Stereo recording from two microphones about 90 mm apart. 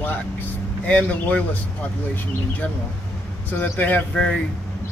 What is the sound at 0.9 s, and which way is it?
Speech, 15° left (ahead or behind).